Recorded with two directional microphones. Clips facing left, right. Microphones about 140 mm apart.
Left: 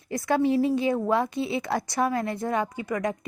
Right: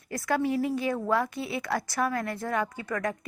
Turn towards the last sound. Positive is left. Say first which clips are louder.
# left 3 dB
turn(degrees=15)  # may be behind; listen again after turning